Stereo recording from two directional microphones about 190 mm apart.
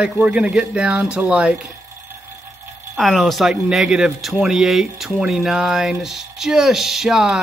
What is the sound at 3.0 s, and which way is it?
Speech, centre (ahead or behind).